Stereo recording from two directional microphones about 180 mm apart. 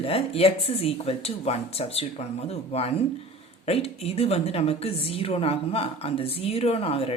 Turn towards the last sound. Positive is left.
turn(degrees=35)  # may be behind; listen again after turning